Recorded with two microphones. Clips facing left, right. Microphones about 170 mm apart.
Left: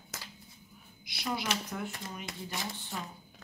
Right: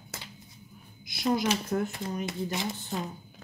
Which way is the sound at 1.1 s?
45° right (ahead or behind).